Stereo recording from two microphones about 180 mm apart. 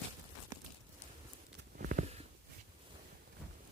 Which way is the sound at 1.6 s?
65° right (ahead or behind).